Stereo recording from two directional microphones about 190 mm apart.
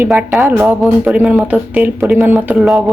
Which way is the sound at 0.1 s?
Centre (ahead or behind).